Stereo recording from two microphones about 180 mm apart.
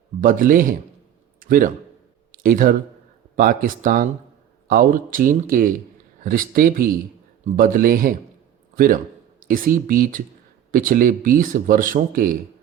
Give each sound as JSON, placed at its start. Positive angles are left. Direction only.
{"t": 0.2, "sound": "speech", "side_deg": -50}
{"t": 1.4, "sound": "a sound", "side_deg": -50}
{"t": 2.3, "sound": "a man's voice", "side_deg": -50}